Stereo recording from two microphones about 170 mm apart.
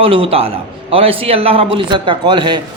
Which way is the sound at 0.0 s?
35° right (ahead or behind).